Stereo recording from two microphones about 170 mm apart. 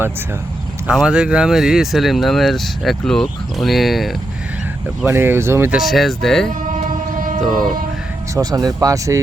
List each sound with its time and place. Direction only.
0.9 s speech: 5° right (ahead or behind)
5.0 s speech: 15° right (ahead or behind)
5.8 s speech: centre (ahead or behind)
6.5 s a sound: 50° right (ahead or behind)
7.4 s speech: centre (ahead or behind)
8.4 s speech: 20° right (ahead or behind)